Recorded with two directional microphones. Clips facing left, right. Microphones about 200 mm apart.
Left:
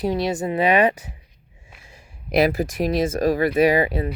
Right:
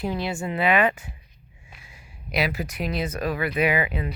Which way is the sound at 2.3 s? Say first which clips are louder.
Left 8 dB; 50° left (ahead or behind).